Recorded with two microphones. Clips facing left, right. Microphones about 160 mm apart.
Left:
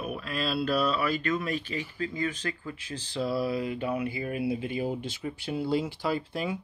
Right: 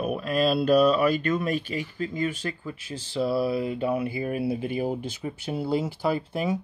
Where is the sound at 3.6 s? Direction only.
30° right (ahead or behind).